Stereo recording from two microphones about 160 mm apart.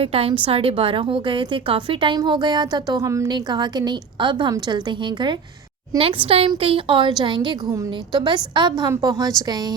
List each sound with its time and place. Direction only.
0.0 s a woman's voice: 35° right (ahead or behind)